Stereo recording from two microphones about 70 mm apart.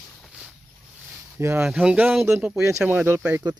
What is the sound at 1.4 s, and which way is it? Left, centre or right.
Speech, right.